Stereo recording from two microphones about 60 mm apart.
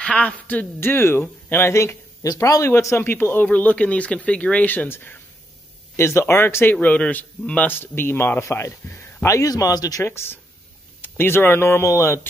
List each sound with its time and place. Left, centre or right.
0.0 s speech: centre
0.7 s a man's voice: left
2.3 s a man's voice: left
2.6 s speech: left
3.0 s a man's voice: left
3.4 s speech: left
5.9 s a man's voice: left
7.7 s a man's voice: left
8.9 s a sound: left
9.3 s speech: left
10.0 s a man's voice: left